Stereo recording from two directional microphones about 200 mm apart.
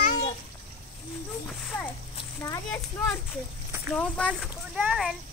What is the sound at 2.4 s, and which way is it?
Speech, 15° left (ahead or behind).